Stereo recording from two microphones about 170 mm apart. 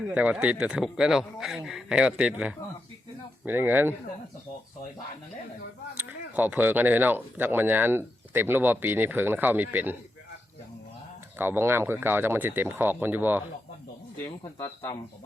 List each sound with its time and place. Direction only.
0.1 s speech: 10° right (ahead or behind)
6.0 s speech: 10° right (ahead or behind)
11.3 s speech: 10° right (ahead or behind)
14.4 s speech: 20° left (ahead or behind)